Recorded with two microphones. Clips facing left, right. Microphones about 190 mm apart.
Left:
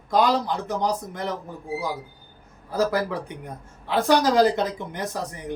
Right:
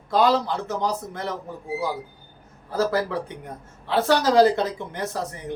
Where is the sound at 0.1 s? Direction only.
15° left (ahead or behind).